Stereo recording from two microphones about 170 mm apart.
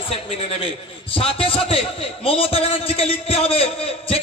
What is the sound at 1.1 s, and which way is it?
A man's voice, 35° left (ahead or behind).